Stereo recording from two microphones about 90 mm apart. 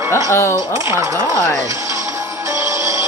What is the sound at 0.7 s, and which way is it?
Speech, 35° right (ahead or behind).